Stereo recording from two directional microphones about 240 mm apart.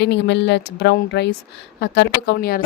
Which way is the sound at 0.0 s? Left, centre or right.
Left.